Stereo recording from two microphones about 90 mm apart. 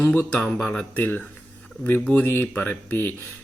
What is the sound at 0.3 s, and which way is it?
Speech, 10° left (ahead or behind).